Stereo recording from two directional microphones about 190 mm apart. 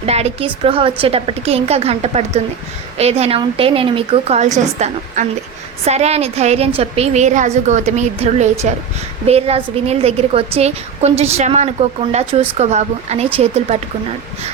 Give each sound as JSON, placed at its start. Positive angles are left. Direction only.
{"t": 0.0, "sound": "a woman's voice", "side_deg": -35}